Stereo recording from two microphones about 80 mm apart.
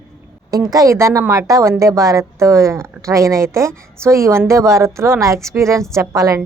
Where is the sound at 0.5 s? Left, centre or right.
Right.